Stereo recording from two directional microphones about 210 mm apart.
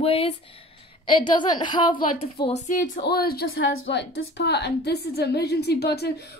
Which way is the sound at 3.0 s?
45° left (ahead or behind).